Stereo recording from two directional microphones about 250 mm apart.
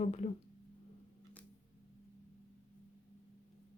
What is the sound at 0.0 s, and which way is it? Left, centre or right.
Speech, left.